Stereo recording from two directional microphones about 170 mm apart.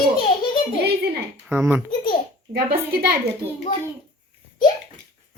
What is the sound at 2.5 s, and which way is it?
Speech, 65° right (ahead or behind).